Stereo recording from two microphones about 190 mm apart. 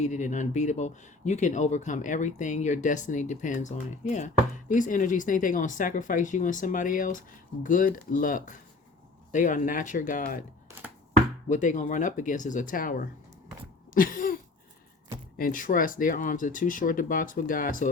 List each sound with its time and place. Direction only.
0.0 s speech: 40° left (ahead or behind)
11.4 s speech: 40° left (ahead or behind)
15.4 s speech: 45° left (ahead or behind)